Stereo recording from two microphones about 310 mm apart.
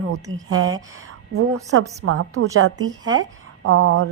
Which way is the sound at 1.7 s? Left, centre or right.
Right.